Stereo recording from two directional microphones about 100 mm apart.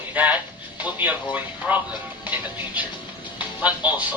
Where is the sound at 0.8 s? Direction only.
15° right (ahead or behind).